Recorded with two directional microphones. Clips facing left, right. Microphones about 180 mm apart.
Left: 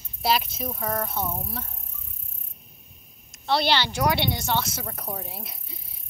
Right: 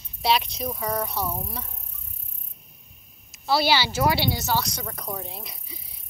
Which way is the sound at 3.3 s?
5° right (ahead or behind).